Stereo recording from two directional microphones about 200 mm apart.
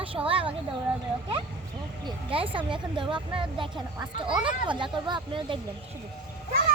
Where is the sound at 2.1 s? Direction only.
25° right (ahead or behind).